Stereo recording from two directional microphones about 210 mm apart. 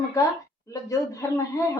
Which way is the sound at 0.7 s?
15° left (ahead or behind).